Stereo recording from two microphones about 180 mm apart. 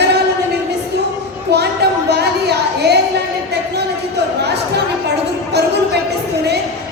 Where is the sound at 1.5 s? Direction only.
65° right (ahead or behind).